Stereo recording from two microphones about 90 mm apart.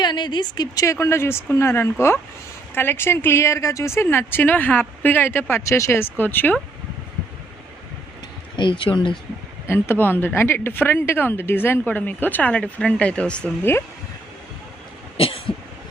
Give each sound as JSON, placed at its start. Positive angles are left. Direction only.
{"t": 0.0, "sound": "speech", "side_deg": 55}
{"t": 0.9, "sound": "a woman's voice", "side_deg": 35}
{"t": 8.5, "sound": "speech", "side_deg": 65}
{"t": 9.6, "sound": "a woman's voice", "side_deg": 25}
{"t": 13.6, "sound": "a woman's voice", "side_deg": 25}